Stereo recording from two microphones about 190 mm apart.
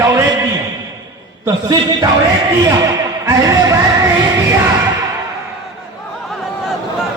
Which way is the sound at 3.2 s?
15° right (ahead or behind).